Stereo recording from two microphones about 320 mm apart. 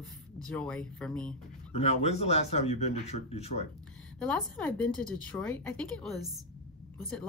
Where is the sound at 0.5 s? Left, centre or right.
Centre.